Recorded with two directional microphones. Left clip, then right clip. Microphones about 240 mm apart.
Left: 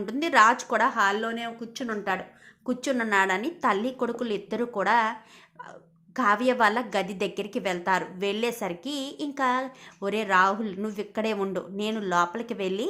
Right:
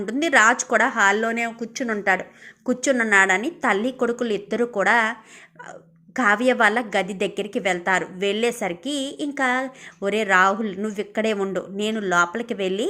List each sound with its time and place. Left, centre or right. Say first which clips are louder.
0.0 s a woman's voice: right 3 dB; centre
6.1 s a woman's voice: right 4 dB; centre